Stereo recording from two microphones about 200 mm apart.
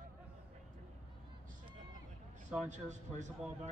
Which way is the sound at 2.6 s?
35° right (ahead or behind).